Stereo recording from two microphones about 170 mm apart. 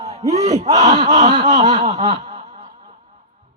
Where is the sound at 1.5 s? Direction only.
45° right (ahead or behind).